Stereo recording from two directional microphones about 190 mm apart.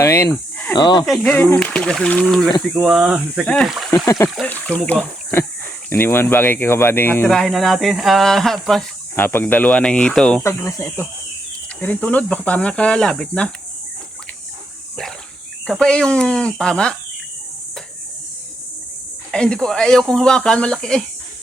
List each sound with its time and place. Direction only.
0.0 s speech: 15° left (ahead or behind)
1.0 s speech: centre (ahead or behind)
3.9 s speech: 15° left (ahead or behind)
10.4 s speech: 15° left (ahead or behind)
15.6 s speech: 5° left (ahead or behind)
19.3 s speech: 5° left (ahead or behind)